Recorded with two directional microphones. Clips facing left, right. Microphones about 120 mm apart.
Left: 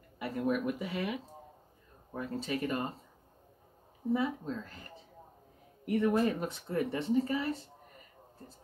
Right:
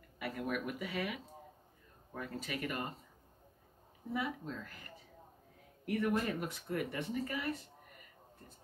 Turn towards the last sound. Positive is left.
turn(degrees=30)  # may be behind; listen again after turning